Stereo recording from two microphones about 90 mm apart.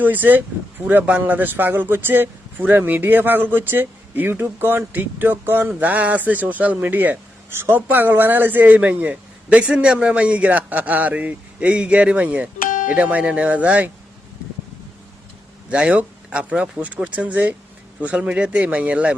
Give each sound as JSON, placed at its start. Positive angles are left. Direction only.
{"t": 0.0, "sound": "speech", "side_deg": -20}
{"t": 15.7, "sound": "speech", "side_deg": -15}